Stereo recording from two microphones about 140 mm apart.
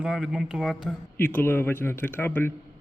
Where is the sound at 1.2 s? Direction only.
15° left (ahead or behind).